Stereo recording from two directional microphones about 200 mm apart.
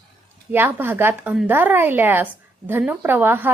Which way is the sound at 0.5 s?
10° right (ahead or behind).